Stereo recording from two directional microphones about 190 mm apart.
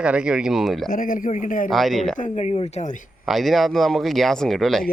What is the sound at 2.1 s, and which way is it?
Speech, 40° left (ahead or behind).